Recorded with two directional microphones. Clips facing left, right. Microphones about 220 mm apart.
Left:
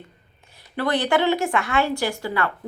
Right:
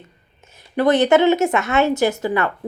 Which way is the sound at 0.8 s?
20° right (ahead or behind).